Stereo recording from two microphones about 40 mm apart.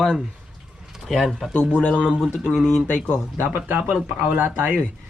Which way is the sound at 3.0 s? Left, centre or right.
Left.